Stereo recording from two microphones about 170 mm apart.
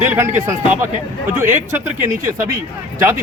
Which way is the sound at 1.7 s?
15° right (ahead or behind).